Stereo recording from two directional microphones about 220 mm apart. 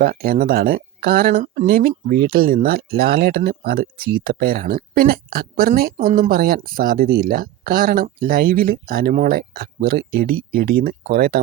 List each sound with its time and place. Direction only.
0.0 s speech: 40° right (ahead or behind)